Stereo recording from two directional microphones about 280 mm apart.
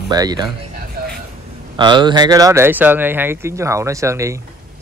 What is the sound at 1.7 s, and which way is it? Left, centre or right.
Speech, centre.